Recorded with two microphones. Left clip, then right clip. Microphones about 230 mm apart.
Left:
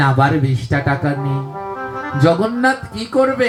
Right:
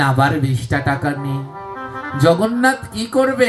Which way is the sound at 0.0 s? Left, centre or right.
Right.